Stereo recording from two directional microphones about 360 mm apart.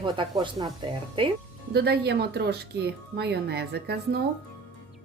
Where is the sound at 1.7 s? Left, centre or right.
Right.